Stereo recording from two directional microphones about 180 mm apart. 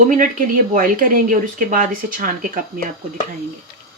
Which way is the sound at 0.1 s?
50° right (ahead or behind).